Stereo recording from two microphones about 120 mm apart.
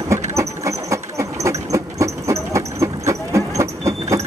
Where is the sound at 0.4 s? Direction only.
25° right (ahead or behind).